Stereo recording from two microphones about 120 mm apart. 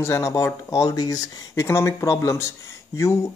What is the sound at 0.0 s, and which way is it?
A man's voice, 25° left (ahead or behind).